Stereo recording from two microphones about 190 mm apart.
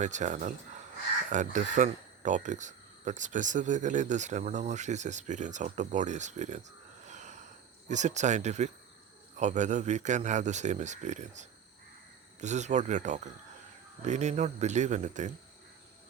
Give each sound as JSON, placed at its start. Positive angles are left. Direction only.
{"t": 0.0, "sound": "speech", "side_deg": -40}